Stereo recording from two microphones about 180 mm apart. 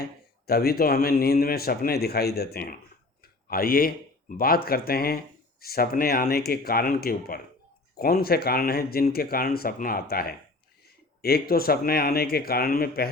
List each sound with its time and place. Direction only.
0.4 s speech: 60° left (ahead or behind)